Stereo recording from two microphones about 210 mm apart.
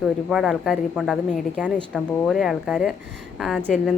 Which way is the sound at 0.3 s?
Centre (ahead or behind).